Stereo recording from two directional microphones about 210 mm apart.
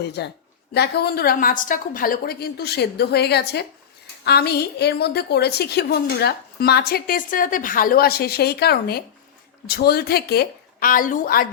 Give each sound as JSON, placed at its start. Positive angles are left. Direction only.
{"t": 0.0, "sound": "a woman's voice", "side_deg": 50}